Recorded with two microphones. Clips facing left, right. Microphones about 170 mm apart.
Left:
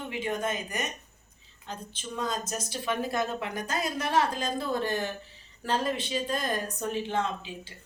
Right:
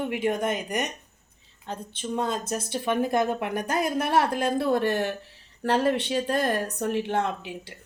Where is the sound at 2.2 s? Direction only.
60° right (ahead or behind).